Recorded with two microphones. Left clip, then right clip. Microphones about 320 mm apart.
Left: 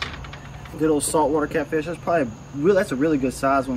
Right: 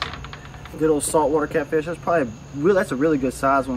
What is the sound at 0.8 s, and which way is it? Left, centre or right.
Speech, centre.